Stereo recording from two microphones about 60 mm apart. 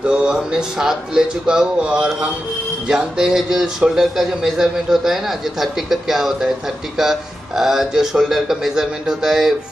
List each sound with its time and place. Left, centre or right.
0.0 s speech: centre